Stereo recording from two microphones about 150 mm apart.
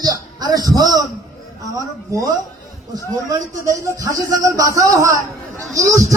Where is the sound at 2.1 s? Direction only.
20° right (ahead or behind).